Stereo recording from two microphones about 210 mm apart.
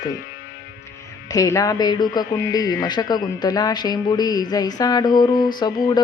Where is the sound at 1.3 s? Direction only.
15° left (ahead or behind).